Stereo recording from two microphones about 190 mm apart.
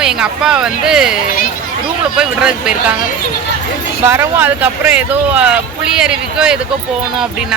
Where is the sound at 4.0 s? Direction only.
15° right (ahead or behind).